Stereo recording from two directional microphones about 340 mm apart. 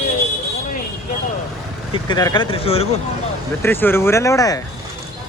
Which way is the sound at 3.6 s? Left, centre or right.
Centre.